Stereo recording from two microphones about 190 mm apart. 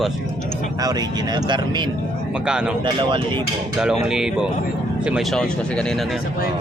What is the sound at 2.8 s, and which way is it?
Speech, 25° right (ahead or behind).